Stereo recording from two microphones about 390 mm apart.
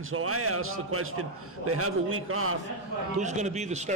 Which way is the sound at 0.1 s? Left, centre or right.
Right.